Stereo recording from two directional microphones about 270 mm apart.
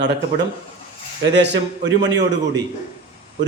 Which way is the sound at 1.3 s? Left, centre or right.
Right.